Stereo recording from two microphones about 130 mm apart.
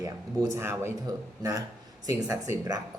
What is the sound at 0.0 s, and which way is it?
Speech, 25° right (ahead or behind).